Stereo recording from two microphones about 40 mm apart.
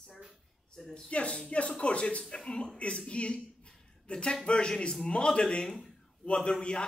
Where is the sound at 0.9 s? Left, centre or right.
Left.